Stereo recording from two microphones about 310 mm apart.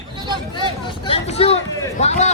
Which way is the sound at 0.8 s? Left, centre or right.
Centre.